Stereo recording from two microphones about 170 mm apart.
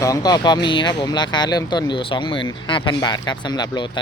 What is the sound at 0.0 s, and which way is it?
Speech, 20° left (ahead or behind).